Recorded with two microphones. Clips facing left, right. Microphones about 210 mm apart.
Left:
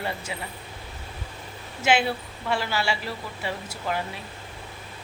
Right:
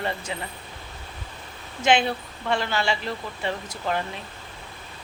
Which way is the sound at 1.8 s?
5° left (ahead or behind).